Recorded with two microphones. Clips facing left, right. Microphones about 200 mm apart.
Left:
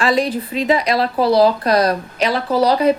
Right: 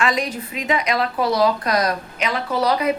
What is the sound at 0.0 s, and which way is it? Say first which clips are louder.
A woman's voice: left 5 dB; 30° left (ahead or behind).